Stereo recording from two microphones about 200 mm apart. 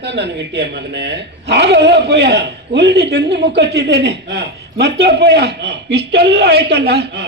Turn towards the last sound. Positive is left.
turn(degrees=-55)  # may be behind; listen again after turning